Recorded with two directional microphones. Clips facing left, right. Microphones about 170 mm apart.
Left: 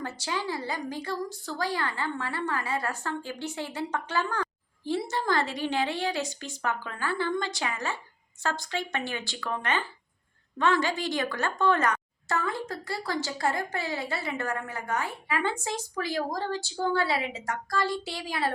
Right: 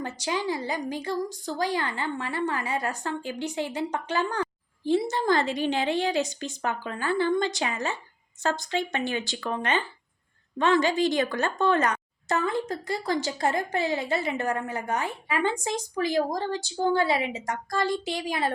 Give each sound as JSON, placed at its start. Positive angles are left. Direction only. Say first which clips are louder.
{"t": 0.0, "sound": "a woman's voice", "louder": "right 3 dB", "side_deg": -15}